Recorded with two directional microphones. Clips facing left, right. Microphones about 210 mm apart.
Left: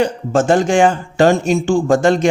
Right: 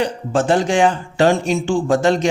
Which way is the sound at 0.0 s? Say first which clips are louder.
Left 3 dB; 45° left (ahead or behind).